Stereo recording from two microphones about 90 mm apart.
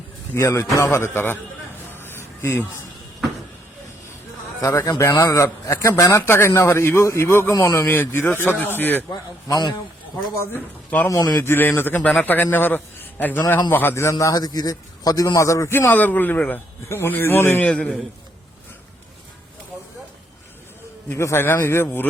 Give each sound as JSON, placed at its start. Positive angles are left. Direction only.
{"t": 0.3, "sound": "a man's voice", "side_deg": 30}
{"t": 1.9, "sound": "a sound", "side_deg": 25}
{"t": 4.6, "sound": "a man's voice", "side_deg": 35}
{"t": 9.5, "sound": "a man's voice", "side_deg": 50}
{"t": 10.5, "sound": "a man's voice", "side_deg": 20}
{"t": 11.1, "sound": "a man's voice", "side_deg": 45}
{"t": 11.4, "sound": "a man's voice", "side_deg": 25}
{"t": 15.9, "sound": "a man's voice", "side_deg": 20}
{"t": 17.7, "sound": "a man's voice", "side_deg": 15}
{"t": 21.1, "sound": "a man's voice", "side_deg": 30}